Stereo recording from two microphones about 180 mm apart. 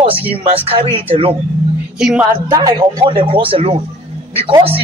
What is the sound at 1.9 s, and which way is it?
Music, 5° right (ahead or behind).